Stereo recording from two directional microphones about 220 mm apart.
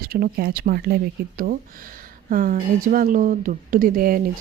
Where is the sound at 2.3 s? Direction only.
40° right (ahead or behind).